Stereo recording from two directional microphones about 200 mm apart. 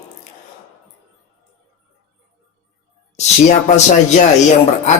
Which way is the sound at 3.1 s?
35° left (ahead or behind).